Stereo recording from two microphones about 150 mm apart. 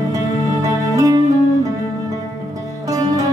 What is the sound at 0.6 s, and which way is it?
Music, 20° right (ahead or behind).